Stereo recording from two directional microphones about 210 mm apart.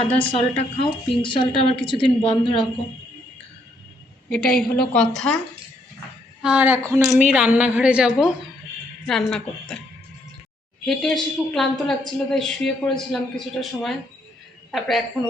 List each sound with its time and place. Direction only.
0.2 s speech: 25° left (ahead or behind)
4.3 s a woman's voice: 45° left (ahead or behind)
4.9 s a woman's voice: 5° left (ahead or behind)
6.4 s a woman's voice: 5° right (ahead or behind)
10.8 s a woman's voice: centre (ahead or behind)